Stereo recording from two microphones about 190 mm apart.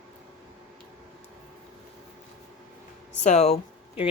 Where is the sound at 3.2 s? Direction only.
35° left (ahead or behind).